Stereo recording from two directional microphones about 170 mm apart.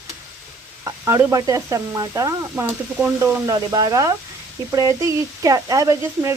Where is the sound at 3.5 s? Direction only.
20° right (ahead or behind).